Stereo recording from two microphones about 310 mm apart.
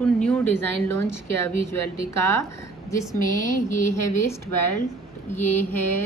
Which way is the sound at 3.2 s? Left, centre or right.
Left.